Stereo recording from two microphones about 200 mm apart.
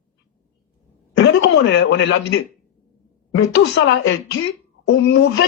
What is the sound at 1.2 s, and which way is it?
Speech, 65° left (ahead or behind).